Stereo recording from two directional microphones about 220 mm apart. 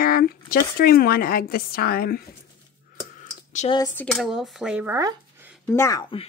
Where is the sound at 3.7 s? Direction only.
10° left (ahead or behind); by 5.6 s 10° right (ahead or behind).